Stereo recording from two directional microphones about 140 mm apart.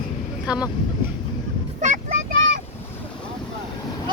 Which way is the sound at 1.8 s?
75° right (ahead or behind).